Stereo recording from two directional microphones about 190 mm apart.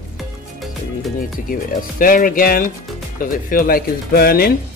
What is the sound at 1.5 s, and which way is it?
Speech, 45° left (ahead or behind).